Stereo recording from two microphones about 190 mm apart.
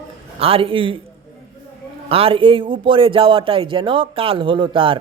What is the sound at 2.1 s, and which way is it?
Speech, 30° right (ahead or behind).